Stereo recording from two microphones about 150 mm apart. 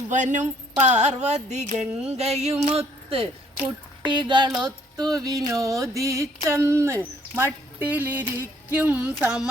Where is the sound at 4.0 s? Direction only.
30° right (ahead or behind).